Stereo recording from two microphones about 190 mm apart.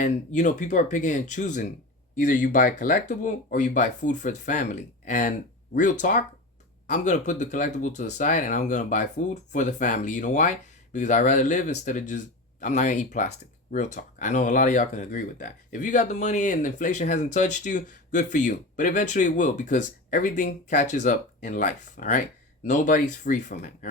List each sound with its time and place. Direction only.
0.0 s speech: 40° left (ahead or behind)